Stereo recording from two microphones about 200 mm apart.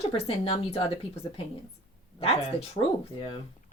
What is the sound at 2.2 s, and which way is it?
Speech, 30° left (ahead or behind).